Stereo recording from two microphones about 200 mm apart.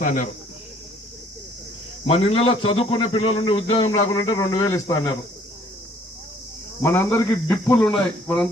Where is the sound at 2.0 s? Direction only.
30° left (ahead or behind).